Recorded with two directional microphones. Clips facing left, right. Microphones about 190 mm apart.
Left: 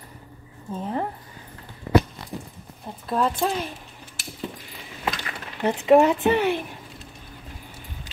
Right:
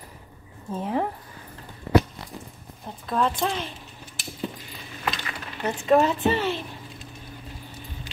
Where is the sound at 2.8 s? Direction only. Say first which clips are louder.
Left 1 dB; 5° left (ahead or behind).